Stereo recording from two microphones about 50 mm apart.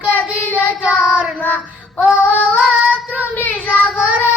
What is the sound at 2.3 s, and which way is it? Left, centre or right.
Female singing, right.